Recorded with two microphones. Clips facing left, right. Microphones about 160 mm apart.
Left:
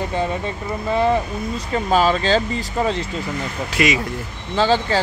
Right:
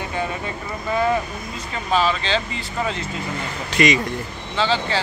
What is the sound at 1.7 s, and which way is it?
Speech, 40° left (ahead or behind).